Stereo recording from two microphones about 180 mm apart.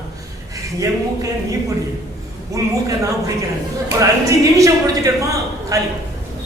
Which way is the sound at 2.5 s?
20° right (ahead or behind).